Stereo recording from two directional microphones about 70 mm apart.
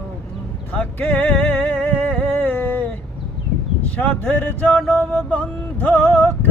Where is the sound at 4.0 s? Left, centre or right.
Left.